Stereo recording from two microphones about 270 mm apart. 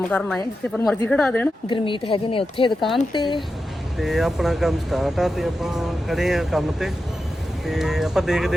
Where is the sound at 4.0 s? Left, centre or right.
Centre.